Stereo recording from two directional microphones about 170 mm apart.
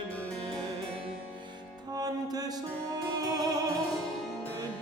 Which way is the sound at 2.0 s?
20° right (ahead or behind).